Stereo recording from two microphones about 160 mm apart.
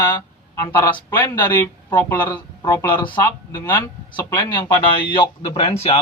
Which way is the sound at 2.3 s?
25° left (ahead or behind).